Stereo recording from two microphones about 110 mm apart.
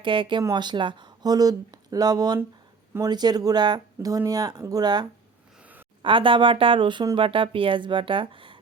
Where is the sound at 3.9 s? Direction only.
30° right (ahead or behind).